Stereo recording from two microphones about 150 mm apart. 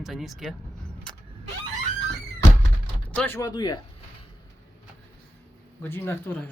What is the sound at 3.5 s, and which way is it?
Speech, 30° left (ahead or behind).